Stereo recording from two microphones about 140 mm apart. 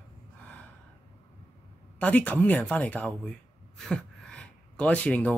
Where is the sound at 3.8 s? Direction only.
5° left (ahead or behind).